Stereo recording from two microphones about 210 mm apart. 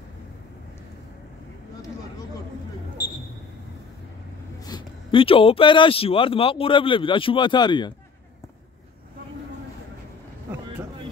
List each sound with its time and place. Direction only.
4.6 s speech: 25° left (ahead or behind)